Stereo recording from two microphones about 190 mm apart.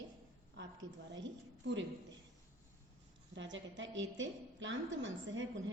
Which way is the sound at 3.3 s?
75° right (ahead or behind).